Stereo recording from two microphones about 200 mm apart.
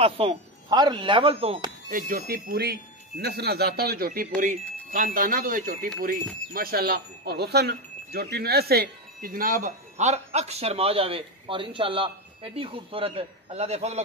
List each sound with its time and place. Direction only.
0.0 s speech: 30° right (ahead or behind)
1.9 s speech: 45° right (ahead or behind)